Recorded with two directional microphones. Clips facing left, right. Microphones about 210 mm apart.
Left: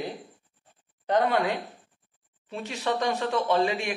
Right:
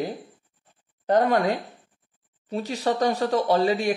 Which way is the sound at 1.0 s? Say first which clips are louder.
Right 4 dB; 45° right (ahead or behind).